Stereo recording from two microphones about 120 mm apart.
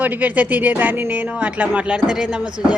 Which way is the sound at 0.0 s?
15° right (ahead or behind).